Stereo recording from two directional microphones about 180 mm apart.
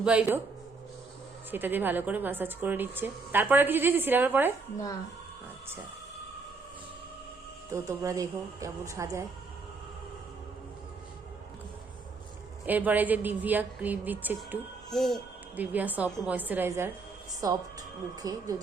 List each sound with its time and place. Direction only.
0.0 s speech: 5° right (ahead or behind)
1.5 s speech: 10° right (ahead or behind)
7.7 s speech: 20° right (ahead or behind)
12.6 s speech: 10° right (ahead or behind)
14.8 s speech: centre (ahead or behind)
15.5 s a woman's voice: 10° right (ahead or behind)